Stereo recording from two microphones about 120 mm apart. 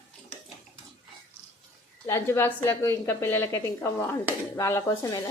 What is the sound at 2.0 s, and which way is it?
Speech, 20° left (ahead or behind).